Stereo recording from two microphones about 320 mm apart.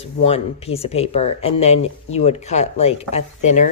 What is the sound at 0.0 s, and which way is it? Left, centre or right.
Speech, centre.